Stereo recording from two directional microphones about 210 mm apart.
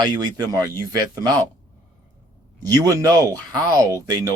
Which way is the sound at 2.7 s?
15° right (ahead or behind).